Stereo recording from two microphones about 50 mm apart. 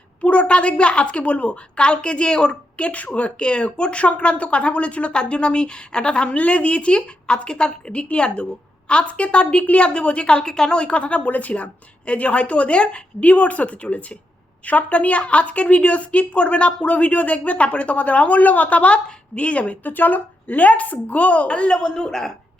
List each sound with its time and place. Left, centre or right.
0.2 s speech: left